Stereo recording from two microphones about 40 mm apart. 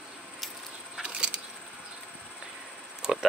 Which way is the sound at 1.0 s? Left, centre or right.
Right.